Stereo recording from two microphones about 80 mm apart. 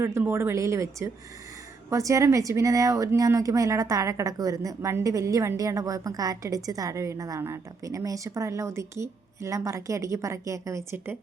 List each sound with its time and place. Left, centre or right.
0.0 s a woman's voice: right